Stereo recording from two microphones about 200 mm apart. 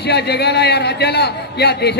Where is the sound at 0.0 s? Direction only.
55° left (ahead or behind).